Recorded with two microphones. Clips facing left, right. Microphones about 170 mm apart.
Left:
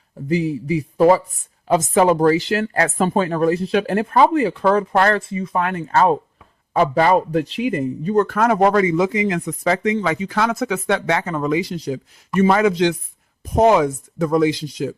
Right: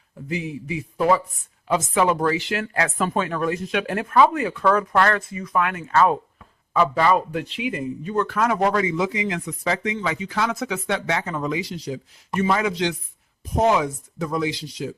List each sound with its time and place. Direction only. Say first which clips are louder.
0.3 s a man's voice: left 8 dB; 35° left (ahead or behind)